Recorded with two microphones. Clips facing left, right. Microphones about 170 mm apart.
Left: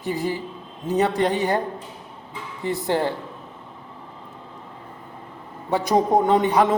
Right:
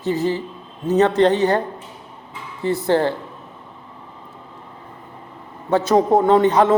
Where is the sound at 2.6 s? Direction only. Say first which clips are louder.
Right 5 dB; 15° left (ahead or behind).